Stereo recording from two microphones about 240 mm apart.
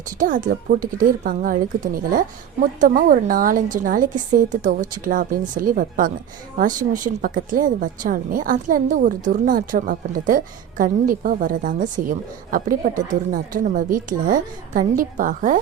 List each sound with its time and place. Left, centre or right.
0.2 s a woman's voice: right